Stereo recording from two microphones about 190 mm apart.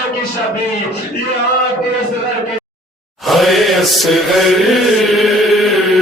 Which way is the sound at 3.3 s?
Centre (ahead or behind).